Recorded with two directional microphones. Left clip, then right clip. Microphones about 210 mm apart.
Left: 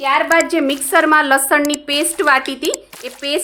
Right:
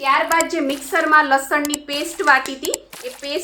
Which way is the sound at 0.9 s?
50° left (ahead or behind).